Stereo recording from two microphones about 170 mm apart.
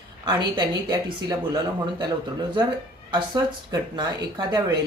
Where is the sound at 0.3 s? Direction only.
25° right (ahead or behind).